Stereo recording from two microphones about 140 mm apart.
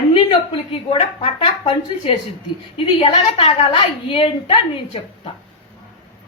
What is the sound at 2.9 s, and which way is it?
A man's voice, 45° left (ahead or behind).